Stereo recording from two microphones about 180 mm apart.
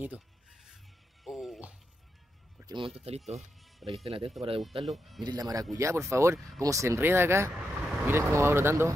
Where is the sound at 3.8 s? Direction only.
Centre (ahead or behind).